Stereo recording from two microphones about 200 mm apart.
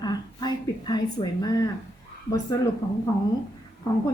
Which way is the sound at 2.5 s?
15° left (ahead or behind).